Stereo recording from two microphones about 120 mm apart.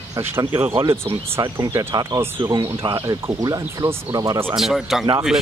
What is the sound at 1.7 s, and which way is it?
Speech, 20° right (ahead or behind).